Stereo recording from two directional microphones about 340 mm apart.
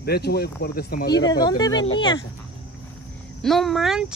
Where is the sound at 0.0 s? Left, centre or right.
Left.